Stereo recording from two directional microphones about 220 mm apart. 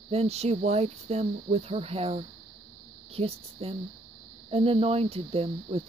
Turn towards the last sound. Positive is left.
turn(degrees=-25)  # may be behind; listen again after turning